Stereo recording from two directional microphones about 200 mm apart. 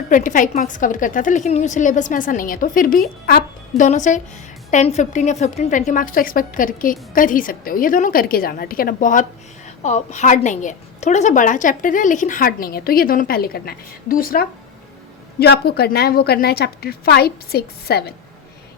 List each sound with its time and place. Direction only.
0.1 s a woman's voice: 40° left (ahead or behind)